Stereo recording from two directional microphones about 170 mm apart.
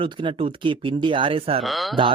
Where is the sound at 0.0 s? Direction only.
30° right (ahead or behind).